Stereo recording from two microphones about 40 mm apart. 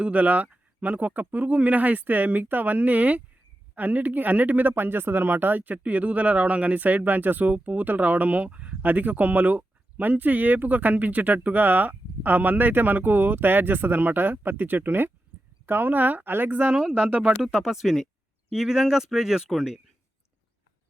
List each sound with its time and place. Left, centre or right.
0.0 s speech: right
4.7 s speech: right
8.8 s speech: right
17.2 s speech: centre